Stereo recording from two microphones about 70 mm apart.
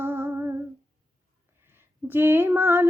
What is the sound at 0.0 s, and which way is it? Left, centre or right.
Humming, right.